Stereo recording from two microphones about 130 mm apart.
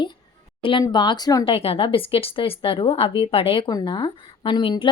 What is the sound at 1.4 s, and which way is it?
A woman's voice, 45° left (ahead or behind).